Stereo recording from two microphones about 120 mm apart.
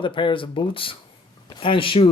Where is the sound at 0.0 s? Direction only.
45° left (ahead or behind).